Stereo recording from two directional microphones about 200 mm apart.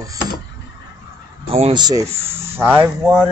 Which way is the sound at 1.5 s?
25° right (ahead or behind).